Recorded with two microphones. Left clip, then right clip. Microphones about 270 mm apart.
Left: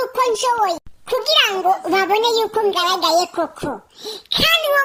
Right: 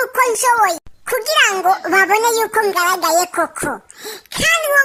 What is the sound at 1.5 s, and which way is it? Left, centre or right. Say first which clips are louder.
Speech: right 2 dB; right.